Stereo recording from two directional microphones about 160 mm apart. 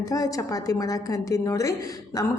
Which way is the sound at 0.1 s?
20° left (ahead or behind).